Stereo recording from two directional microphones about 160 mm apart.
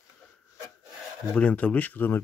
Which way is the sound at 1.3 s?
5° left (ahead or behind).